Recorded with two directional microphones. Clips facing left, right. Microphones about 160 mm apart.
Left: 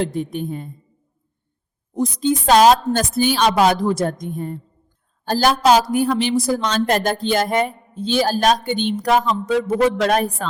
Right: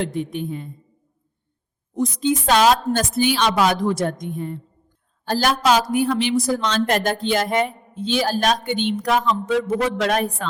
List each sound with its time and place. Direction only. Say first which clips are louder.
0.0 s speech: left 2 dB; 40° left (ahead or behind)
2.0 s speech: left 1 dB; 40° left (ahead or behind)